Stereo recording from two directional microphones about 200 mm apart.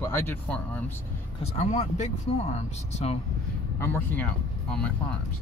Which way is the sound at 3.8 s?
10° left (ahead or behind).